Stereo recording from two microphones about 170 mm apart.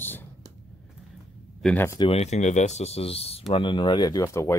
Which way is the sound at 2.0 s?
35° left (ahead or behind).